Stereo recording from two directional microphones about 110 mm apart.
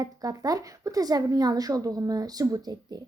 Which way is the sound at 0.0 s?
35° right (ahead or behind).